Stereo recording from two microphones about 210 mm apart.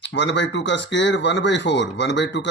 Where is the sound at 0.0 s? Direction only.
55° left (ahead or behind).